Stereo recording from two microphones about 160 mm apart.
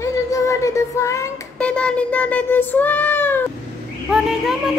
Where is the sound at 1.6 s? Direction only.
5° left (ahead or behind).